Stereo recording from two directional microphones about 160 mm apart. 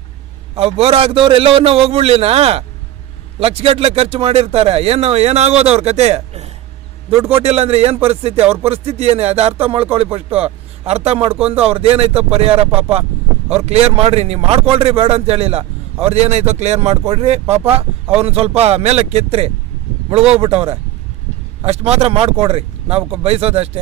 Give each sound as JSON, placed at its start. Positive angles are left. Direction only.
{"t": 0.6, "sound": "a man's voice", "side_deg": -40}